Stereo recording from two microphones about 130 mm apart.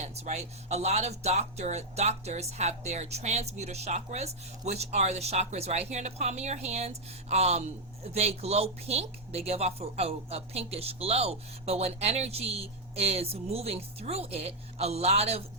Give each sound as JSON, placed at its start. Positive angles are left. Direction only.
{"t": 0.0, "sound": "speech", "side_deg": -55}